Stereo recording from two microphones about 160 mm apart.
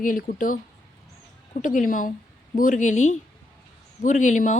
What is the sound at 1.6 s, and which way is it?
A woman's voice, 55° left (ahead or behind).